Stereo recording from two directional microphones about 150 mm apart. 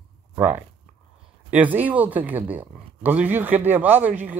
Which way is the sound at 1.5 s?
10° right (ahead or behind).